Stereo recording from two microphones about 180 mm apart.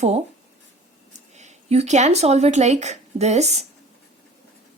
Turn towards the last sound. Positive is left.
turn(degrees=-40)  # may be behind; listen again after turning